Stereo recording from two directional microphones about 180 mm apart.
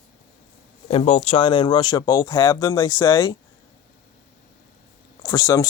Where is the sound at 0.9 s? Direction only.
35° left (ahead or behind).